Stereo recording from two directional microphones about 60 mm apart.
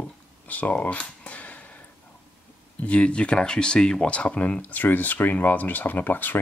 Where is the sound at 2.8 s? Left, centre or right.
Centre.